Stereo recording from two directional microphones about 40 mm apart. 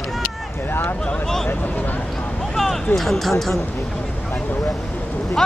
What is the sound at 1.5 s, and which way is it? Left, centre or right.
Speech, left.